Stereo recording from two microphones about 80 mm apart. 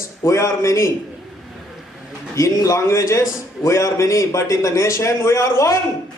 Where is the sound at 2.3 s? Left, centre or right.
Left.